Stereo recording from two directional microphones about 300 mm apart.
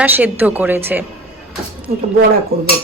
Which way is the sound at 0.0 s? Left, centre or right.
Centre.